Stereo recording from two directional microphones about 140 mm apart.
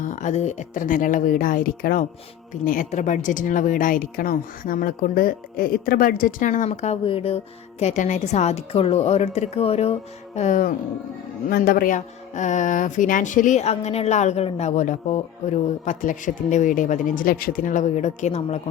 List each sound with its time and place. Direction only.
0.0 s speech: 65° left (ahead or behind); by 2.0 s 90° left
2.6 s speech: 65° left (ahead or behind); by 9.9 s 45° left (ahead or behind)
10.3 s speech: 60° left (ahead or behind)
11.4 s speech: 90° left; by 18.6 s 55° left (ahead or behind)